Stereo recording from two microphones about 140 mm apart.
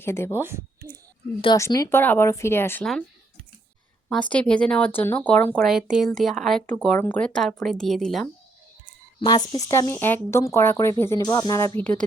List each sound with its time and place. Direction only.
0.0 s speech: 20° left (ahead or behind)
0.3 s speech: 15° right (ahead or behind)
1.5 s speech: 20° left (ahead or behind)
4.1 s speech: 10° left (ahead or behind)
5.6 s speech: 5° right (ahead or behind)
9.2 s speech: 30° left (ahead or behind)
9.7 s speech: 15° left (ahead or behind)
11.8 s speech: 10° left (ahead or behind)